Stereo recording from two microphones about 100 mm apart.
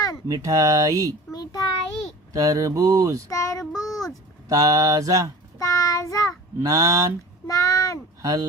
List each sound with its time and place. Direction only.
0.3 s mantra: 35° right (ahead or behind)
1.3 s a sound: 40° left (ahead or behind)
2.3 s mantra: 35° right (ahead or behind)
3.2 s child singing: 30° left (ahead or behind)
3.7 s child singing: 5° right (ahead or behind)
4.4 s mantra: 35° right (ahead or behind)
5.5 s child singing: 35° left (ahead or behind)
6.6 s mantra: 35° right (ahead or behind)
7.4 s a sound: 35° left (ahead or behind)
8.2 s speech: 40° right (ahead or behind)